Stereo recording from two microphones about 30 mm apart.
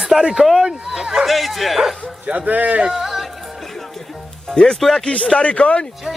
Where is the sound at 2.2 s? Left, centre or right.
Right.